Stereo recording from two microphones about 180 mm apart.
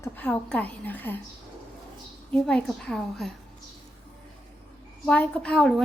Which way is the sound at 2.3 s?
5° left (ahead or behind).